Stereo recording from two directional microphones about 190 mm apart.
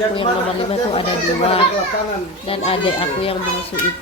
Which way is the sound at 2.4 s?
30° left (ahead or behind).